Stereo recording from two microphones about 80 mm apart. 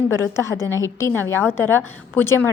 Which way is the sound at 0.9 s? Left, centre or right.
Left.